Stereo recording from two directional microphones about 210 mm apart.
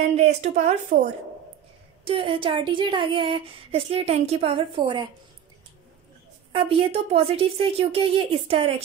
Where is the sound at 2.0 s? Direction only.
25° right (ahead or behind).